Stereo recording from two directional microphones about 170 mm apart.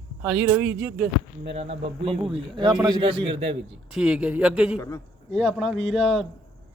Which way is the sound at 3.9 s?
5° right (ahead or behind).